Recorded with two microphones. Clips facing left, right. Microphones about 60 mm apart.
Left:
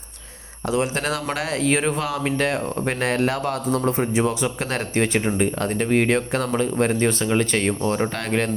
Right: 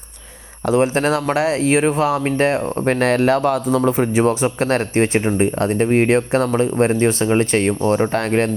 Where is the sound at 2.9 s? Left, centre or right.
Right.